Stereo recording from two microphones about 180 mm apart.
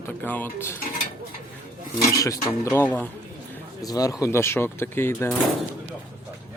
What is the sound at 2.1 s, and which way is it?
Speech, 20° left (ahead or behind).